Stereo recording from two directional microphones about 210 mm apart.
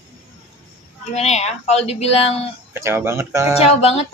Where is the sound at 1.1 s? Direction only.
30° left (ahead or behind).